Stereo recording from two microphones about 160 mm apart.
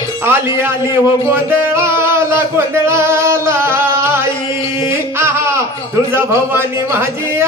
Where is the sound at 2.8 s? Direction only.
15° right (ahead or behind).